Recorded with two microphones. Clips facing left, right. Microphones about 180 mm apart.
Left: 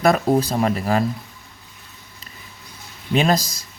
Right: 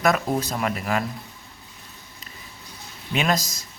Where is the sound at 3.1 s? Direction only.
35° left (ahead or behind).